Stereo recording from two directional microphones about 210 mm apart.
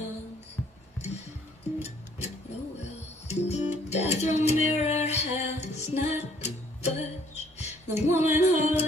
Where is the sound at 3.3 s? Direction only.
30° left (ahead or behind).